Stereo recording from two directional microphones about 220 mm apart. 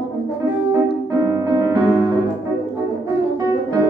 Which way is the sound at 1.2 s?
15° right (ahead or behind).